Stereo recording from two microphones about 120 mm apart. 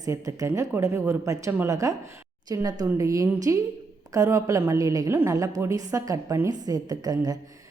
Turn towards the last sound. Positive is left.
turn(degrees=-30)  # may be behind; listen again after turning